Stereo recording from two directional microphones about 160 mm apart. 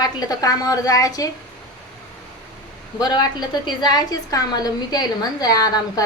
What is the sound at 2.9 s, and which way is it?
A woman's voice, 25° left (ahead or behind).